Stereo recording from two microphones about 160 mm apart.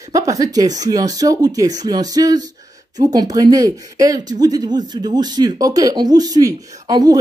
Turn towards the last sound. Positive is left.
turn(degrees=-25)  # may be behind; listen again after turning